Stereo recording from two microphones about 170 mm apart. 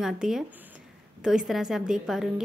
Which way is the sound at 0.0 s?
5° right (ahead or behind).